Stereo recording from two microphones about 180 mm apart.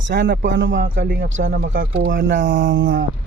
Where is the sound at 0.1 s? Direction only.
75° right (ahead or behind).